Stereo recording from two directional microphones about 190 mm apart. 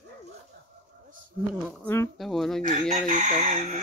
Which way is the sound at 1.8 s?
15° left (ahead or behind).